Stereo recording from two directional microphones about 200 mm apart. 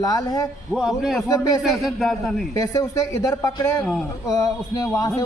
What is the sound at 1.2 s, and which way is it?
Speech, 15° left (ahead or behind).